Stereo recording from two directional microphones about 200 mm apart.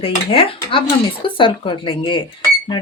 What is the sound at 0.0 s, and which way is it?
Speech, 30° left (ahead or behind).